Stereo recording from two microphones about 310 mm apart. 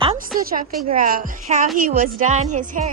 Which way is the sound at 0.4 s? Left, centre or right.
Right.